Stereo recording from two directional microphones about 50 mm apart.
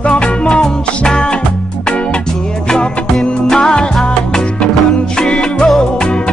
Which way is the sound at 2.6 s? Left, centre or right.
Centre.